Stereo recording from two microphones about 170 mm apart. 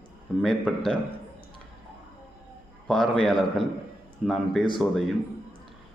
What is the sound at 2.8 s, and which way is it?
A man's voice, centre (ahead or behind).